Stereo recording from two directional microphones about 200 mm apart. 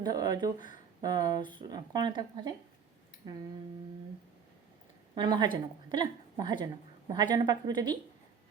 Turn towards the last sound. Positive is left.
turn(degrees=-20)  # may be behind; listen again after turning